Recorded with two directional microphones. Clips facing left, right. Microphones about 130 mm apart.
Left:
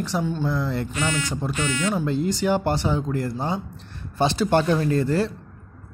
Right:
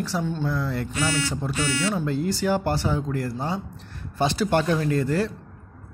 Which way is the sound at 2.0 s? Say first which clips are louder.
Left 2 dB; 20° left (ahead or behind).